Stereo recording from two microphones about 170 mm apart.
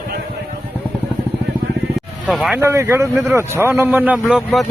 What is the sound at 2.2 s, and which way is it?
Speech, centre (ahead or behind).